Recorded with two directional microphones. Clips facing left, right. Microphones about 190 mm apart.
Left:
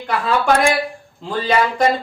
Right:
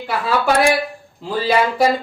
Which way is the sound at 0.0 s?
5° right (ahead or behind).